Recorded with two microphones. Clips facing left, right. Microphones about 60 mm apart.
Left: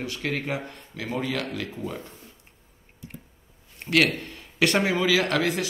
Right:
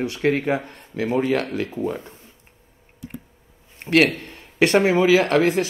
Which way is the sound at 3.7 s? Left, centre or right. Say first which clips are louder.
Right 5 dB; right.